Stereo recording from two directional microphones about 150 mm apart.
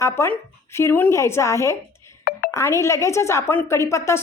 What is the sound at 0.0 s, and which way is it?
A woman's voice, 20° left (ahead or behind).